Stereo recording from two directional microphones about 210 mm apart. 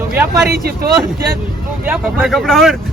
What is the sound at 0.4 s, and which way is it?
Speech, 45° right (ahead or behind).